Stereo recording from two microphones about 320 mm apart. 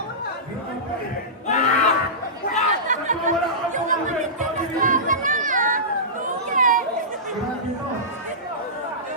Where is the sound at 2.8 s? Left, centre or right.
Right.